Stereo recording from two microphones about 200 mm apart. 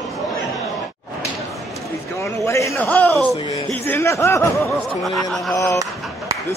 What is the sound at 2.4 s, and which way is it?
A man's voice, 15° left (ahead or behind).